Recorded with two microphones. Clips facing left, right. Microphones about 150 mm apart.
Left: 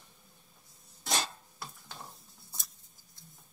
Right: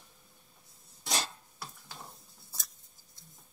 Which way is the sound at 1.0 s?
Centre (ahead or behind).